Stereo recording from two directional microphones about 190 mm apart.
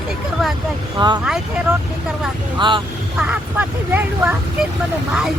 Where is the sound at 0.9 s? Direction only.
25° right (ahead or behind).